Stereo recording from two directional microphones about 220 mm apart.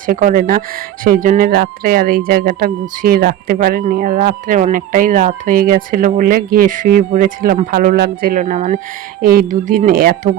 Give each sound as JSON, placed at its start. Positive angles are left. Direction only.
{"t": 0.0, "sound": "speech", "side_deg": -35}